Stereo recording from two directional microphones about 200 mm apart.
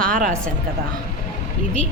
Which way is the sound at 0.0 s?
40° right (ahead or behind).